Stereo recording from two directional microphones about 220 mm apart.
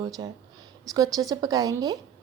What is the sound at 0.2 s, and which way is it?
Speech, 20° right (ahead or behind).